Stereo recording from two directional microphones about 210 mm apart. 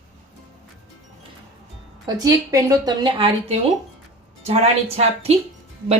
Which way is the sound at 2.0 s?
15° right (ahead or behind).